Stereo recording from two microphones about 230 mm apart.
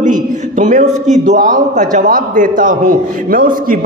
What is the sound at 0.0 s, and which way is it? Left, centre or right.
A man's voice, right.